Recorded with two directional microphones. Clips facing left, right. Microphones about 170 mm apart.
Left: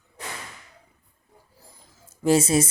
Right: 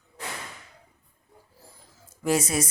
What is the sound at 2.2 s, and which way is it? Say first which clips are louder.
Speech: left 5 dB; 25° left (ahead or behind).